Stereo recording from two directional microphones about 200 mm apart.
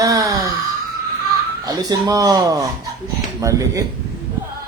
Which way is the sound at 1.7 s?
20° right (ahead or behind).